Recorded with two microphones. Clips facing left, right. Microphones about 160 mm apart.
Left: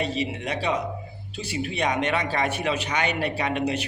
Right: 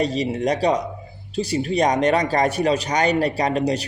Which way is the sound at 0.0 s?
40° right (ahead or behind).